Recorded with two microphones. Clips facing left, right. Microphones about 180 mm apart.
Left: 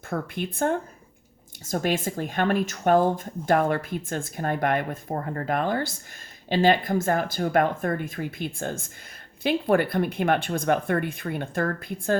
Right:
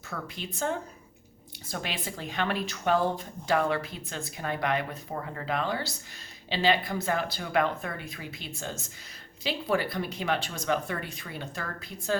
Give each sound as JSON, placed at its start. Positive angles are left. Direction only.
{"t": 0.1, "sound": "speech", "side_deg": 55}